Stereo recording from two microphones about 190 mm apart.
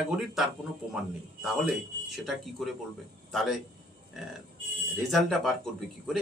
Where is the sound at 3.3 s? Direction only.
Centre (ahead or behind).